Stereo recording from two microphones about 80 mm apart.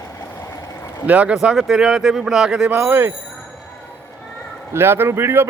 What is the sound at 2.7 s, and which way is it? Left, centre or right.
Speech, right.